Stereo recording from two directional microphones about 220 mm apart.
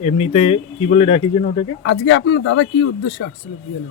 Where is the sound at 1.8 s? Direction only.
55° left (ahead or behind).